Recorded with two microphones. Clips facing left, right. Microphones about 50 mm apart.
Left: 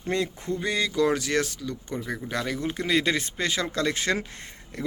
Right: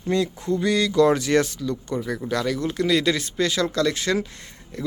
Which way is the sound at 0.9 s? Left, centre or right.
Centre.